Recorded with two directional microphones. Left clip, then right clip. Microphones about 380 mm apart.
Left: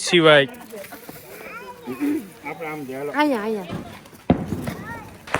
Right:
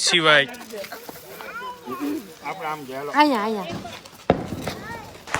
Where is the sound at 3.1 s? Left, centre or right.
Centre.